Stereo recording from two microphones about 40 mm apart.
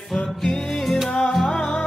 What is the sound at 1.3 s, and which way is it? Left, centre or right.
Music, centre.